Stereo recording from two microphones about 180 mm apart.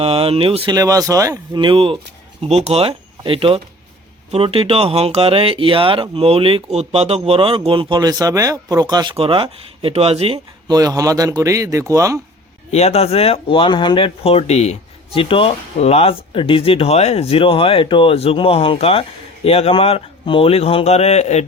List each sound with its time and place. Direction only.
0.0 s speech: 35° right (ahead or behind); by 12.2 s 15° right (ahead or behind)
12.7 s speech: 35° left (ahead or behind)